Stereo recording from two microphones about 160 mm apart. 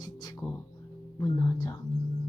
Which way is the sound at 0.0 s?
25° left (ahead or behind).